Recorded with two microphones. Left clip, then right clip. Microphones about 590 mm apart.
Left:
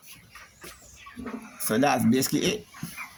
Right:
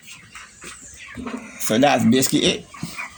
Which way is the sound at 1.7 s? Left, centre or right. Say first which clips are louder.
Right 6 dB; left.